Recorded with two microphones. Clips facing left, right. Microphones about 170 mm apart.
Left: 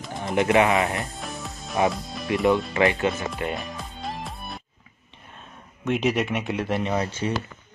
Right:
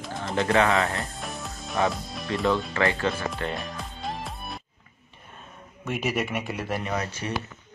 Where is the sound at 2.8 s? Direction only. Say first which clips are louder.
Left 3 dB; 20° left (ahead or behind).